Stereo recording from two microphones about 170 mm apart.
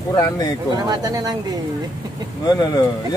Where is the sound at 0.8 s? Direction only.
25° right (ahead or behind).